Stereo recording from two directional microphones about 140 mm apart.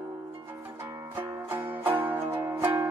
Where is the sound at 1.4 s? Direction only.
15° right (ahead or behind).